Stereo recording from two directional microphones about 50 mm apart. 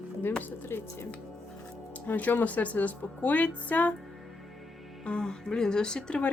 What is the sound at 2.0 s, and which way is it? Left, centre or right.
Speech, left.